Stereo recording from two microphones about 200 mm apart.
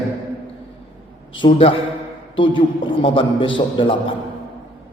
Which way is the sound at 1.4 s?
25° left (ahead or behind).